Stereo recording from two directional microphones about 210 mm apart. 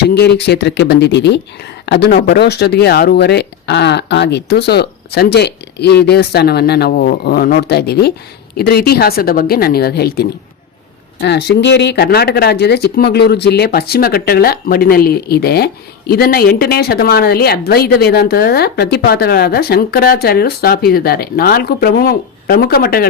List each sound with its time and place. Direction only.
0.0 s speech: 50° left (ahead or behind)